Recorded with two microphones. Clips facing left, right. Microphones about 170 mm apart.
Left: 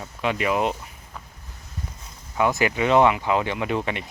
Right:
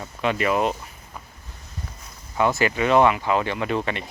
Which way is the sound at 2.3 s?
15° left (ahead or behind).